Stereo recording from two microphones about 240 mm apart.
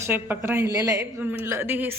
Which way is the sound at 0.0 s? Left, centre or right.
Centre.